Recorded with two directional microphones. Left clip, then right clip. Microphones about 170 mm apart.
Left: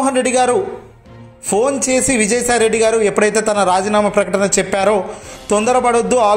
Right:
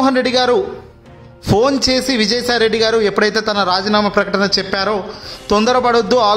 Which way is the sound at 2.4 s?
25° right (ahead or behind).